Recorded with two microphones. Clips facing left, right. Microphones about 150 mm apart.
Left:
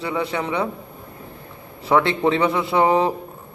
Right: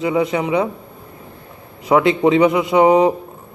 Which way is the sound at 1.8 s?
15° right (ahead or behind).